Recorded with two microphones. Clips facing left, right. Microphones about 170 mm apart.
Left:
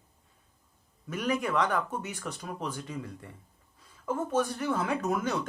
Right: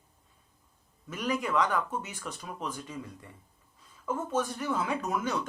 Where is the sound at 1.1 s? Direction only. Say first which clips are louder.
Left 1 dB; 55° left (ahead or behind).